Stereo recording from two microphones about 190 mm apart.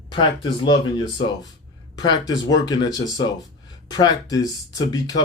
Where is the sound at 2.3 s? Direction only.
20° left (ahead or behind).